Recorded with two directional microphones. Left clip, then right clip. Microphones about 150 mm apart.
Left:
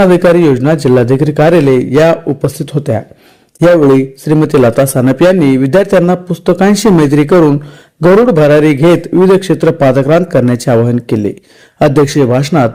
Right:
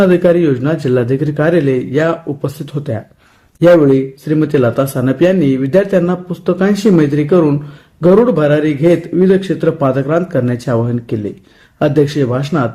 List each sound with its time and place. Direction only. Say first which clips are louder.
0.0 s speech: left 4 dB; 35° left (ahead or behind)